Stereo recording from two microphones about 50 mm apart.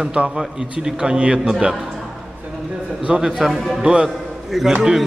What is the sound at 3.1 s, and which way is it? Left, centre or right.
Speech, centre.